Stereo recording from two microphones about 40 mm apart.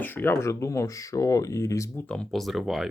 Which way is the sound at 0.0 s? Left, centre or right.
Left.